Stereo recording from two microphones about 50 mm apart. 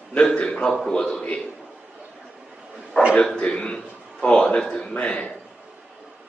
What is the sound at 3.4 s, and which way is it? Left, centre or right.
A man's voice, centre.